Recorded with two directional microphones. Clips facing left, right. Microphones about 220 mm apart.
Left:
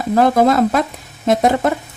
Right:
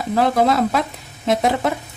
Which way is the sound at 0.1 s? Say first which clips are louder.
Left 4 dB; 45° left (ahead or behind).